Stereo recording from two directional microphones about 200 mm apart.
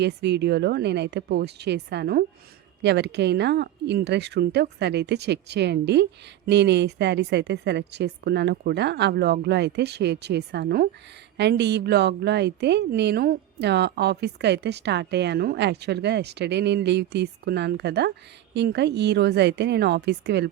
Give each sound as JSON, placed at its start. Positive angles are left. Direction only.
{"t": 0.0, "sound": "speech", "side_deg": -55}